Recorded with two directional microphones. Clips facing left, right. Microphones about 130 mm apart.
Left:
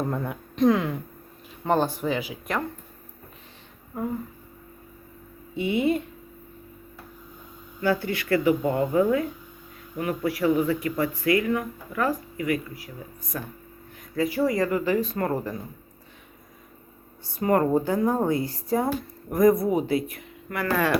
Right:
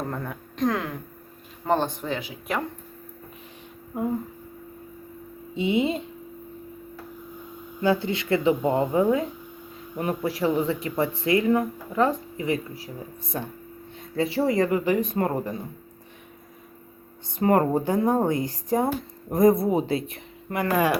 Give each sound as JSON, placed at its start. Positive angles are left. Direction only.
{"t": 0.1, "sound": "speech", "side_deg": 5}
{"t": 5.5, "sound": "speech", "side_deg": -20}
{"t": 7.8, "sound": "speech", "side_deg": -20}
{"t": 17.2, "sound": "speech", "side_deg": -25}